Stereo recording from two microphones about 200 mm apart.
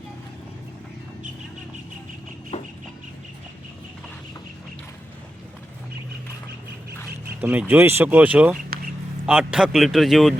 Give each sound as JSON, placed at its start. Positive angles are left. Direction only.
{"t": 2.5, "sound": "chicken", "side_deg": 30}
{"t": 7.4, "sound": "a man's voice", "side_deg": -10}